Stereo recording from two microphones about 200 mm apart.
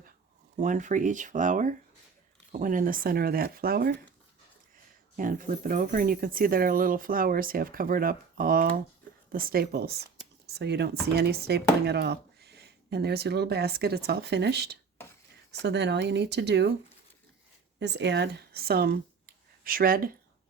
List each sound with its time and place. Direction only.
0.5 s speech: 40° right (ahead or behind)
5.1 s speech: 45° right (ahead or behind); by 16.7 s 60° right (ahead or behind)
17.7 s speech: 60° right (ahead or behind)